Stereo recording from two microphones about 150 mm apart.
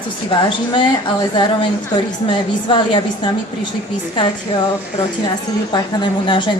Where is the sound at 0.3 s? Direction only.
35° left (ahead or behind).